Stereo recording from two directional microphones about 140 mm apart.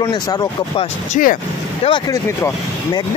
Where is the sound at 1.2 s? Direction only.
65° left (ahead or behind).